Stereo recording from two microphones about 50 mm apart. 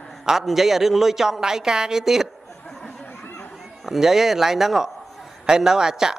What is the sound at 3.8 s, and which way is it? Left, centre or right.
A man's voice, centre.